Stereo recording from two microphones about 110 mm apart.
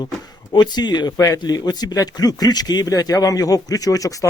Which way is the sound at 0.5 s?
40° left (ahead or behind).